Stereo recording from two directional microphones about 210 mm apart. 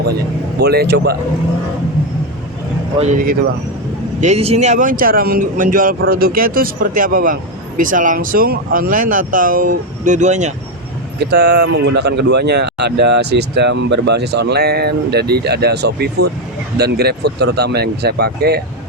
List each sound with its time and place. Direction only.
0.6 s speech: 50° right (ahead or behind)
3.0 s speech: 40° right (ahead or behind)
11.2 s speech: 50° right (ahead or behind)